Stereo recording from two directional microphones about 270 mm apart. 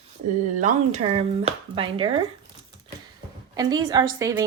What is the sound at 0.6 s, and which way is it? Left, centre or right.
Speech, right.